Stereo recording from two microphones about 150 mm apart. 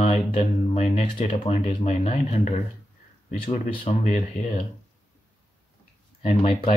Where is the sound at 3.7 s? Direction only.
40° left (ahead or behind).